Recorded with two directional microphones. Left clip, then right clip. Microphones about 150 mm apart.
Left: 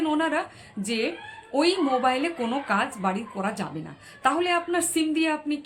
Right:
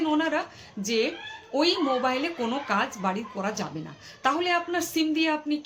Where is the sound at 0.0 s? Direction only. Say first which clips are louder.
Left 1 dB; 15° left (ahead or behind).